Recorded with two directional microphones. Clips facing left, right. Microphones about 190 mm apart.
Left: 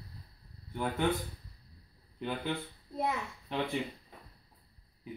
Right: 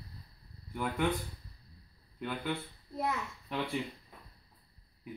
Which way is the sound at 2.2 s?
25° left (ahead or behind).